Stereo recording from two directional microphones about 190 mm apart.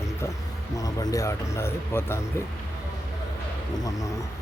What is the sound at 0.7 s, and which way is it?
Speech, 20° left (ahead or behind).